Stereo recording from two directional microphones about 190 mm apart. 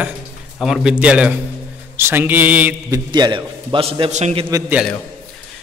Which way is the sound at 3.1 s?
25° right (ahead or behind).